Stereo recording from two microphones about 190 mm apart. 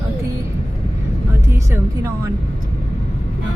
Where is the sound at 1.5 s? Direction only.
15° right (ahead or behind).